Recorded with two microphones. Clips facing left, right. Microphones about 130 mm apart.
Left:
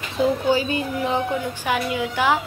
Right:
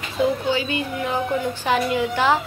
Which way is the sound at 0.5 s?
40° left (ahead or behind).